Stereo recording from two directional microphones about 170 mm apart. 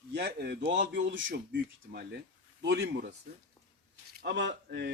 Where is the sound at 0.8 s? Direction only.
90° right.